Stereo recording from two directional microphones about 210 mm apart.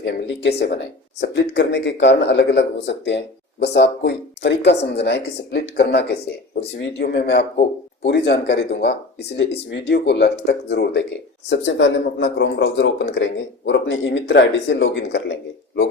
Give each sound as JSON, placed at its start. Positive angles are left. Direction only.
{"t": 0.0, "sound": "speech", "side_deg": 55}